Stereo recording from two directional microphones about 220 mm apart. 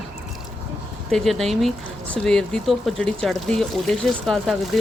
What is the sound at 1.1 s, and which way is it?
Speech, centre (ahead or behind).